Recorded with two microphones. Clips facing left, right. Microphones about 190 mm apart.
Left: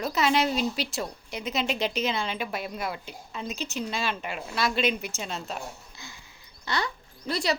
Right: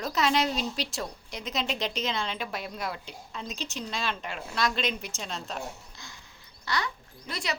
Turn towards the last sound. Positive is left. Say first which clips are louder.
# left 7 dB
turn(degrees=35)  # may be behind; listen again after turning